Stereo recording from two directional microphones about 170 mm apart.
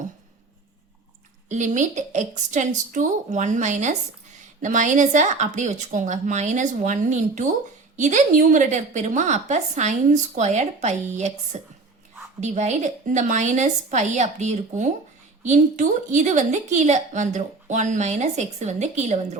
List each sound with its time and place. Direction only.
1.5 s a woman's voice: 45° right (ahead or behind)